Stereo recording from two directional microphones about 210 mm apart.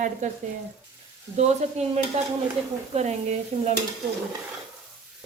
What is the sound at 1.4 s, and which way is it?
Stir, 30° right (ahead or behind).